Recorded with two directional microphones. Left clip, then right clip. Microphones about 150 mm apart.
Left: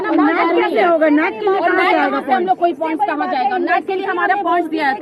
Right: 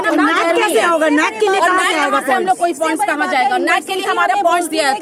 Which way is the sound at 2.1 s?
35° right (ahead or behind).